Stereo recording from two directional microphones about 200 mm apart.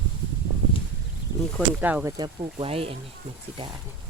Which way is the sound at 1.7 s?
10° right (ahead or behind).